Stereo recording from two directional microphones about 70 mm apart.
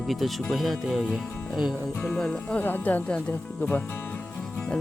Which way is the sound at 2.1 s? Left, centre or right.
Centre.